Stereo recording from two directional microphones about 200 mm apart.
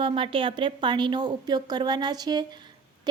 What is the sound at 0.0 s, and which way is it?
Speech, 25° right (ahead or behind).